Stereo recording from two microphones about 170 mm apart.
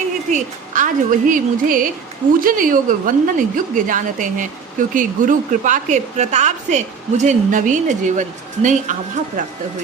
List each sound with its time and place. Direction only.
0.3 s a woman's voice: 45° right (ahead or behind)